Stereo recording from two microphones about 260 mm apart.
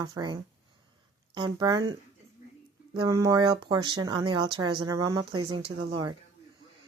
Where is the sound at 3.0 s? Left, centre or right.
Centre.